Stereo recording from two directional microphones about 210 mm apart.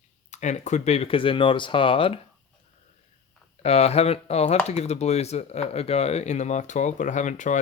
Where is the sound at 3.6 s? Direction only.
30° left (ahead or behind).